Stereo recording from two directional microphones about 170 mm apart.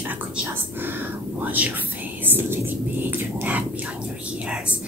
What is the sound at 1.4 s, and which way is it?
Speech, 10° right (ahead or behind).